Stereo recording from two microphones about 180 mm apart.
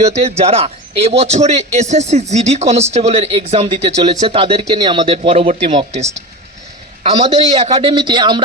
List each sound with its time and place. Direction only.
0.0 s a man's voice: 35° right (ahead or behind)